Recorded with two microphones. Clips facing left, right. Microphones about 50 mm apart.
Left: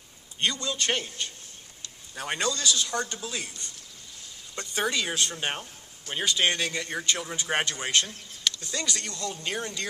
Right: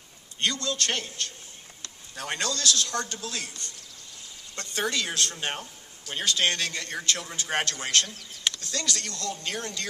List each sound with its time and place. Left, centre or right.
0.4 s a man's voice: centre